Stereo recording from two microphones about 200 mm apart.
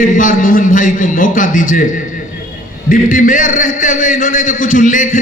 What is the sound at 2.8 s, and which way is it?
A man's voice, 45° left (ahead or behind).